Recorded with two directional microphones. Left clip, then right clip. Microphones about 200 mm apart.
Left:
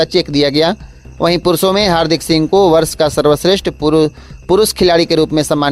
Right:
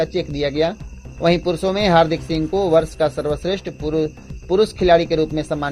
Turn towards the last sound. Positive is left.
turn(degrees=35)  # may be behind; listen again after turning